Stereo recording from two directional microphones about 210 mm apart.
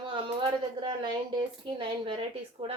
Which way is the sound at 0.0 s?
25° right (ahead or behind).